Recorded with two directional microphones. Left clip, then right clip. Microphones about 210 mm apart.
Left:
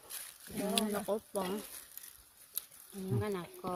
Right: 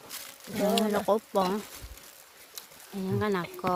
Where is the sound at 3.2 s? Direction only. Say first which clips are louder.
Right 9 dB; 10° right (ahead or behind).